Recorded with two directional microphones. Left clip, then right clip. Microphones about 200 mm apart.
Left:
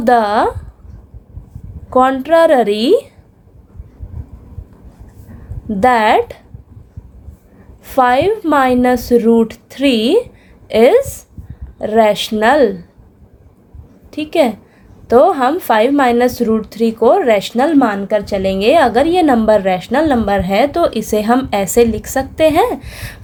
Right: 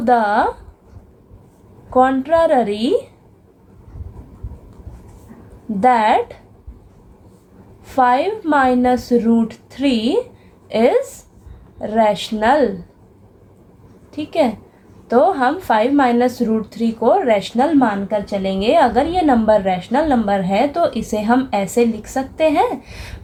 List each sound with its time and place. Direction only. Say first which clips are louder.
0.0 s a woman's voice: left 3 dB; 45° left (ahead or behind)
1.9 s a woman's voice: left 3 dB; 45° left (ahead or behind)
5.8 s a woman's voice: left 3 dB; 45° left (ahead or behind)
7.9 s a woman's voice: left 3 dB; 45° left (ahead or behind)
14.1 s a woman's voice: left 4 dB; 45° left (ahead or behind)